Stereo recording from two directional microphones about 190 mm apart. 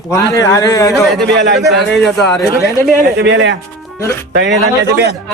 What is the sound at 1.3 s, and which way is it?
Speech, 60° right (ahead or behind).